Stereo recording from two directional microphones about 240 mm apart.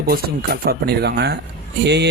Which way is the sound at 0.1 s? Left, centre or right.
Right.